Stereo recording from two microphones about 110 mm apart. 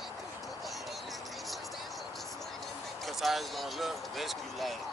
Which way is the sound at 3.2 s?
Centre (ahead or behind).